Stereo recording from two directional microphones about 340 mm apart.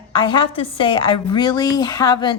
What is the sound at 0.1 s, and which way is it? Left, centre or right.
Speech, centre.